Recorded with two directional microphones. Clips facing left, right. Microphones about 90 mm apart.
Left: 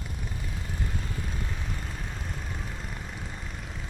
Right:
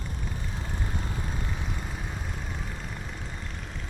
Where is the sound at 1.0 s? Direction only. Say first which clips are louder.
Right 1 dB; 20° right (ahead or behind).